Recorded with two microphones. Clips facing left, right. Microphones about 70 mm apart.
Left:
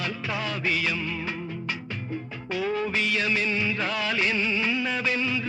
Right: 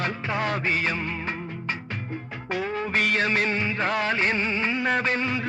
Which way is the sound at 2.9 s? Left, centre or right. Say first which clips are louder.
Right 3 dB; right.